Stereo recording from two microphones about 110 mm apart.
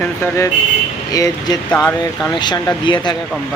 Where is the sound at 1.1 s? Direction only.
35° left (ahead or behind).